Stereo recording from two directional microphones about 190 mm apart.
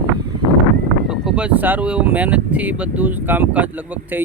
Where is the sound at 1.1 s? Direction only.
5° right (ahead or behind).